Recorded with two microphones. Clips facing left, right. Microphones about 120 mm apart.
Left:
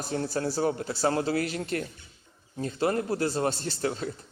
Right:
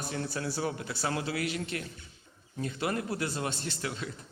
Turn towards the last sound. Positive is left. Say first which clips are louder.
# left 6 dB
turn(degrees=35)  # may be behind; listen again after turning